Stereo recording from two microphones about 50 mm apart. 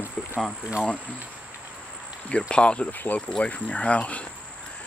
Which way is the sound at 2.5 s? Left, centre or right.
Left.